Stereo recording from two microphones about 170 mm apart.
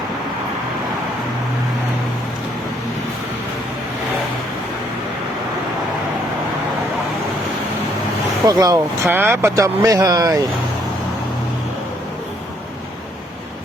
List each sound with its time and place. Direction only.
8.4 s speech: 20° right (ahead or behind)